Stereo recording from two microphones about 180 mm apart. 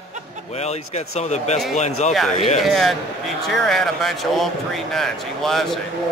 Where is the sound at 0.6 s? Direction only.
35° left (ahead or behind).